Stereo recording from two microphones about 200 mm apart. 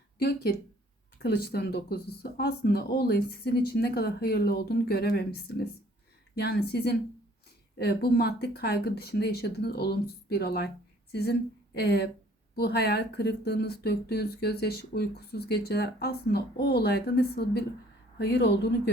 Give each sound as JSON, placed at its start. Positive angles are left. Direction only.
{"t": 0.2, "sound": "a woman's voice", "side_deg": 50}